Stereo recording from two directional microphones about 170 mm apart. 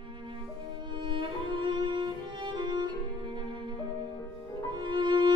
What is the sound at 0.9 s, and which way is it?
Music, 30° right (ahead or behind).